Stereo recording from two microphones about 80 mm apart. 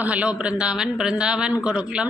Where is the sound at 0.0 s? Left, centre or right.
Centre.